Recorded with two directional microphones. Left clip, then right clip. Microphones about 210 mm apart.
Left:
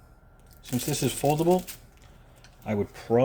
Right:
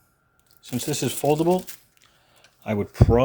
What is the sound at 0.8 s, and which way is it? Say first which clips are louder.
Speech: right 2 dB; 25° right (ahead or behind).